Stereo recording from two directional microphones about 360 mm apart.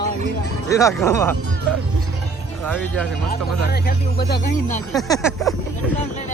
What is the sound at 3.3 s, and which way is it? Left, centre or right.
Speech, left.